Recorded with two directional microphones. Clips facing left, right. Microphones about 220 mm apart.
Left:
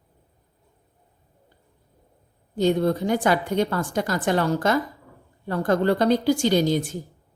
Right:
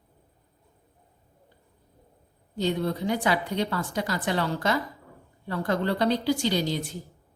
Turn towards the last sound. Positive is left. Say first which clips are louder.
# left 7 dB
turn(degrees=50)  # may be behind; listen again after turning